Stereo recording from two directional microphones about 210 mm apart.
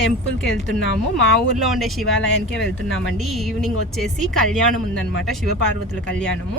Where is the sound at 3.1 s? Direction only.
Centre (ahead or behind).